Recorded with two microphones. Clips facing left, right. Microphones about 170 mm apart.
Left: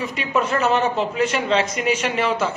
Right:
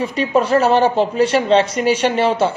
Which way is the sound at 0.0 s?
30° right (ahead or behind).